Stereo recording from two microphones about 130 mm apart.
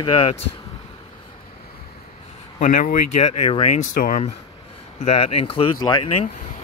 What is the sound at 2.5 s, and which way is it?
Speech, 80° left.